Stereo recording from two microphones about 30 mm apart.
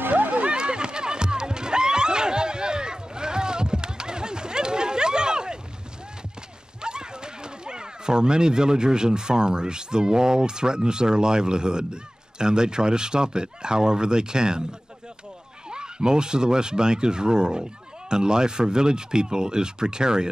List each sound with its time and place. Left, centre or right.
0.3 s music: right
6.8 s speech: right
15.7 s speech: right